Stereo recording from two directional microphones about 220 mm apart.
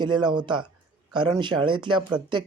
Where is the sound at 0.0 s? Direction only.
20° right (ahead or behind).